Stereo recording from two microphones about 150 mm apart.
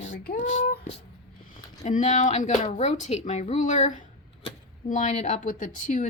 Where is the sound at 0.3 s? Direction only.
55° left (ahead or behind).